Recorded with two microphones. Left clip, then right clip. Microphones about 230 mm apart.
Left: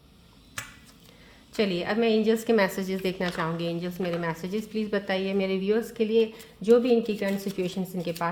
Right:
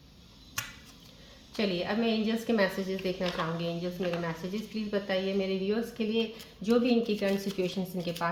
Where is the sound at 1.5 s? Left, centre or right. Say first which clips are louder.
Left 5 dB; left.